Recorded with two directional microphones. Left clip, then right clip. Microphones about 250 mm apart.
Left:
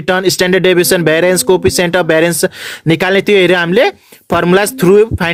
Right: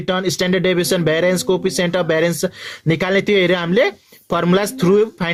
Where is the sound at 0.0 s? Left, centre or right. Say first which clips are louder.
Left 7 dB; left.